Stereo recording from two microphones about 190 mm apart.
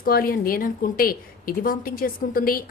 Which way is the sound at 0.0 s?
50° left (ahead or behind).